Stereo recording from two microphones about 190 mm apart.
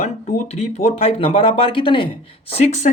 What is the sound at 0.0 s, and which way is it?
Speech, 35° left (ahead or behind).